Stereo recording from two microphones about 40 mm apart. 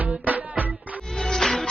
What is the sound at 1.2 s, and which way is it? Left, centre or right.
Music, centre.